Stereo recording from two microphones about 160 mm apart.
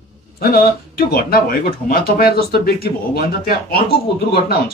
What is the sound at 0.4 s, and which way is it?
Speech, 70° left (ahead or behind).